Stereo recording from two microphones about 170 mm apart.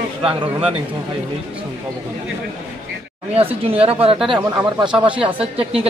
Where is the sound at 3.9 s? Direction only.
35° right (ahead or behind).